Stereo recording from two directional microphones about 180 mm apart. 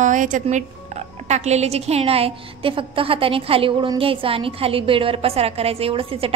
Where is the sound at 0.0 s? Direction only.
45° right (ahead or behind).